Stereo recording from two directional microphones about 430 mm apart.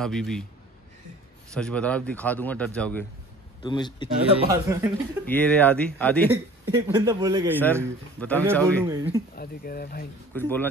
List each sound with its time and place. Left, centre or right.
0.0 s speech: centre
1.5 s a man's voice: centre
4.3 s speech: centre
5.2 s speech: centre
6.7 s speech: centre
7.5 s speech: centre
8.8 s speech: centre
9.4 s speech: left
10.3 s speech: centre